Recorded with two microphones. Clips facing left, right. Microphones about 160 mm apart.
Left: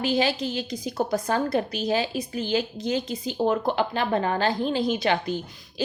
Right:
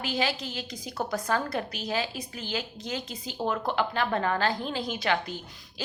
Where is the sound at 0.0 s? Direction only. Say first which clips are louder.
Left 6 dB; 25° left (ahead or behind).